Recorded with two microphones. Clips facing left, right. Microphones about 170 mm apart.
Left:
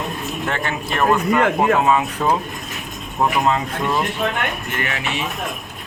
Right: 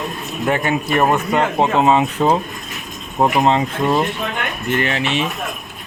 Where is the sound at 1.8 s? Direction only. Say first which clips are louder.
Right 3 dB; 25° right (ahead or behind).